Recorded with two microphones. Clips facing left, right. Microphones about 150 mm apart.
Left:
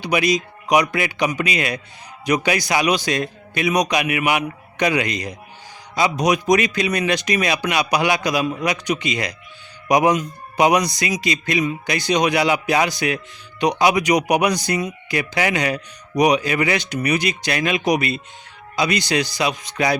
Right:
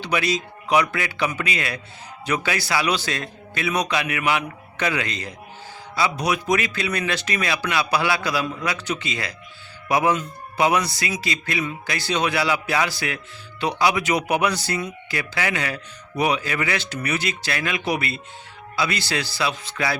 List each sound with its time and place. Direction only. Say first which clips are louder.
0.0 s a man's voice: left 4 dB; 15° left (ahead or behind)